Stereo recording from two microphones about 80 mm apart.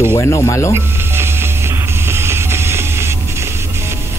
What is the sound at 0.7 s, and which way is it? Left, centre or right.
Music, right.